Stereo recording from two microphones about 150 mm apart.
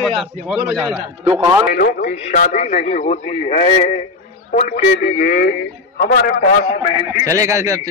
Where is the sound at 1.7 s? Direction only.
80° left.